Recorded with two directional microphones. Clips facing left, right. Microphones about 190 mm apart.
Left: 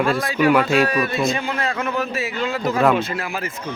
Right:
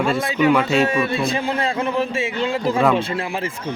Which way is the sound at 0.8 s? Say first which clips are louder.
Even; 25° right (ahead or behind).